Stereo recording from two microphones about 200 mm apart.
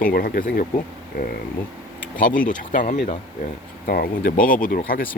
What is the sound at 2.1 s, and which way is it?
Speech, 45° left (ahead or behind).